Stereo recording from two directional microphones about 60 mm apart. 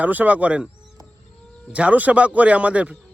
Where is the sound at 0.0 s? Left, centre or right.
Right.